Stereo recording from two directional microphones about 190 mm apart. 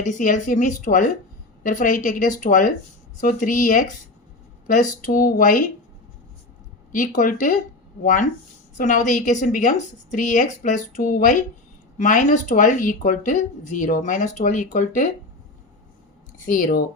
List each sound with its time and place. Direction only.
0.0 s a woman's voice: 40° left (ahead or behind)
6.9 s a woman's voice: 45° left (ahead or behind)
16.5 s speech: 45° left (ahead or behind)